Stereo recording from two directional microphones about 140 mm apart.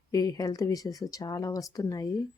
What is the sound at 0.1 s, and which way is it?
A woman's voice, 25° left (ahead or behind).